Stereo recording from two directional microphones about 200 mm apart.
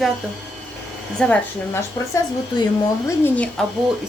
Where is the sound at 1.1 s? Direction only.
5° left (ahead or behind).